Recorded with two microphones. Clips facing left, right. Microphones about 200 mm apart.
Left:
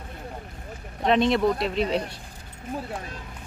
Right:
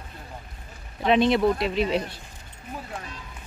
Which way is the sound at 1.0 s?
Centre (ahead or behind).